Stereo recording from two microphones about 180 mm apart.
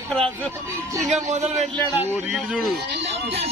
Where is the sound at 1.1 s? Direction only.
40° right (ahead or behind).